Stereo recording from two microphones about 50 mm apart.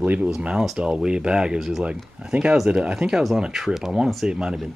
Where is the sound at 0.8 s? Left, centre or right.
Right.